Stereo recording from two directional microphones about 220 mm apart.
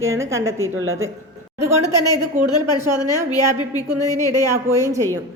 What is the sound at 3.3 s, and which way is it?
Speech, 15° left (ahead or behind).